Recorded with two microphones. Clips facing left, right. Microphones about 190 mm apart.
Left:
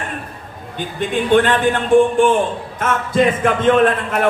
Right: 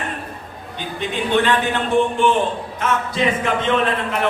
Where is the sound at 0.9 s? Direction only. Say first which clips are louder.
Left 5 dB; 50° left (ahead or behind).